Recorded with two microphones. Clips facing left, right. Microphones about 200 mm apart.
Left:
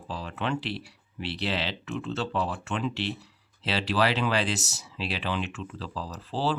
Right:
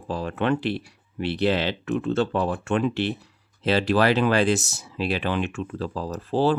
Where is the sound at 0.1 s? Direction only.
55° right (ahead or behind).